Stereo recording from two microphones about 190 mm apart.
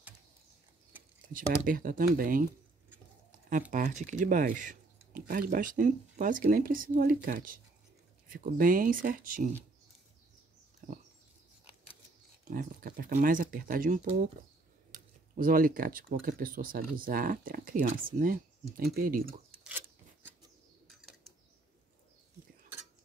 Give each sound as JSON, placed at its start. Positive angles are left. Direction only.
{"t": 1.3, "sound": "speech", "side_deg": -45}
{"t": 3.3, "sound": "a sound", "side_deg": -45}
{"t": 3.7, "sound": "speech", "side_deg": -40}
{"t": 10.8, "sound": "dog", "side_deg": -45}
{"t": 12.4, "sound": "speech", "side_deg": -45}
{"t": 20.8, "sound": "a sound", "side_deg": 0}